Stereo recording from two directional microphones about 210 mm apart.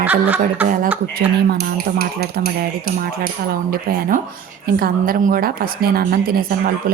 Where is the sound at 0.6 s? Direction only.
40° right (ahead or behind).